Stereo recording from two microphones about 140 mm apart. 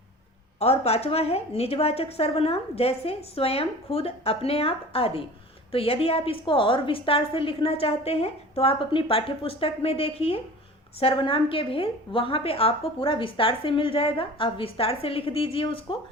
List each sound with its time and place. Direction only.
0.6 s a woman's voice: 45° left (ahead or behind)